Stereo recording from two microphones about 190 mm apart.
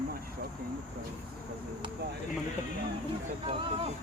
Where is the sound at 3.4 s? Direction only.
30° right (ahead or behind).